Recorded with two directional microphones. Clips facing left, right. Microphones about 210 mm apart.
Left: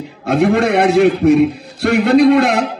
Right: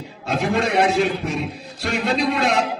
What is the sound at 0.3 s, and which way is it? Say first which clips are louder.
A man's voice: left 8 dB; 60° left (ahead or behind).